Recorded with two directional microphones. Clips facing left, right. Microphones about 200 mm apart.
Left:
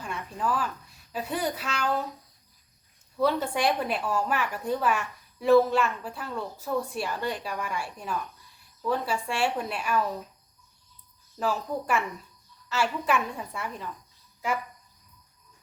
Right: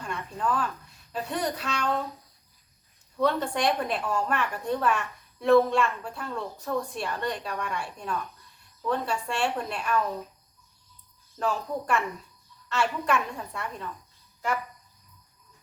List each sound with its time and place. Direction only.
0.0 s a woman's voice: 5° left (ahead or behind)
3.2 s a woman's voice: 5° left (ahead or behind)
11.3 s a woman's voice: 5° left (ahead or behind)